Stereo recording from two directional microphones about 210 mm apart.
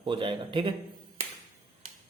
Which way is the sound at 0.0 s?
25° right (ahead or behind).